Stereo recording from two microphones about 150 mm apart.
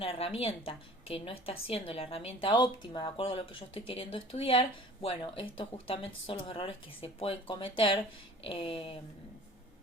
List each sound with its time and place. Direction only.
0.0 s a woman's voice: 40° left (ahead or behind)